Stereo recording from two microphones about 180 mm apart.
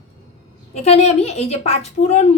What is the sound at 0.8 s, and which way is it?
Speech, 35° left (ahead or behind).